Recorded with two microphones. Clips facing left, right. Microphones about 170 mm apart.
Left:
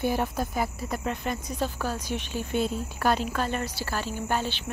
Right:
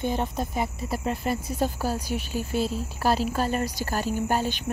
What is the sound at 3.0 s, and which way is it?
Speech, 35° right (ahead or behind).